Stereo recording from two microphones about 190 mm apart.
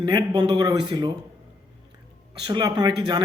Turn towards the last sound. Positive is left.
turn(degrees=-20)  # may be behind; listen again after turning